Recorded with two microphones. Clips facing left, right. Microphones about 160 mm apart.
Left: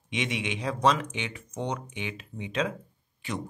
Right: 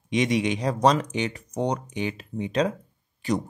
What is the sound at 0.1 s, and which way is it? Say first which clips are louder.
Speech: right 8 dB; 40° right (ahead or behind).